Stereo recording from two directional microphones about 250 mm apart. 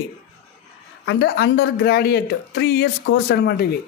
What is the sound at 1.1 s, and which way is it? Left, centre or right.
Speech, left.